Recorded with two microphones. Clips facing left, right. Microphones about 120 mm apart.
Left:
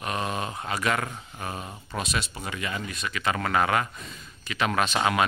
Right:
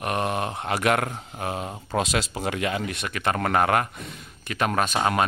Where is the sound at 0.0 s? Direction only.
60° right (ahead or behind).